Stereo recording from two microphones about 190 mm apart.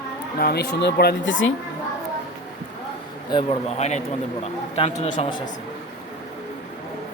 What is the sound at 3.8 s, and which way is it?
Speech, 35° left (ahead or behind).